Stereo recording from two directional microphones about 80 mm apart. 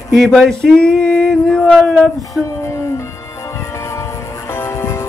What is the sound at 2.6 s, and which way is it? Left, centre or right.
Music, left.